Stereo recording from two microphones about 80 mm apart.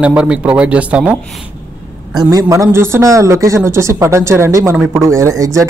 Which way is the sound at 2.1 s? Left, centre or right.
Right.